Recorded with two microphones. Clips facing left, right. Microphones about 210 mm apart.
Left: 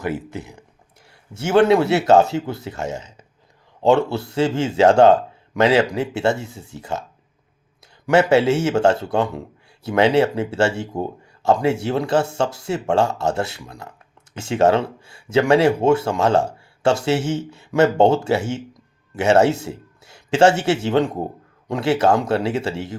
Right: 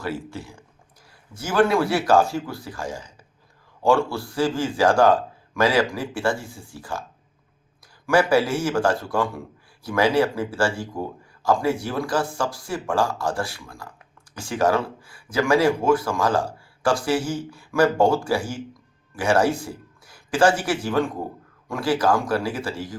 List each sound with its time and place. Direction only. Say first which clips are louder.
0.3 s speech: left 3 dB; 20° left (ahead or behind)
8.0 s a man's voice: left 4 dB; 25° left (ahead or behind)